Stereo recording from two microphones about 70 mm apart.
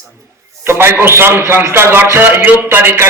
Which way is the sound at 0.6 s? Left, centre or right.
Right.